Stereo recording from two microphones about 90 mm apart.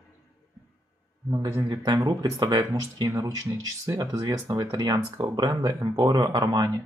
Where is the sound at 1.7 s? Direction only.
50° right (ahead or behind).